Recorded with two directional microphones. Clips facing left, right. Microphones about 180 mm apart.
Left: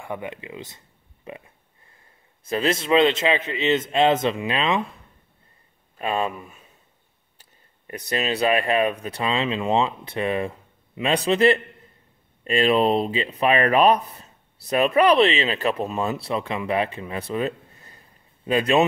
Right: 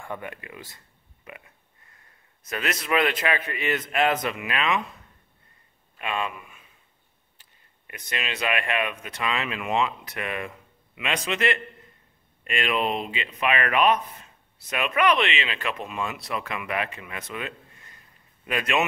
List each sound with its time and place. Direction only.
0.0 s speech: 15° left (ahead or behind)
2.4 s a man's voice: 30° left (ahead or behind)
5.9 s speech: 35° left (ahead or behind)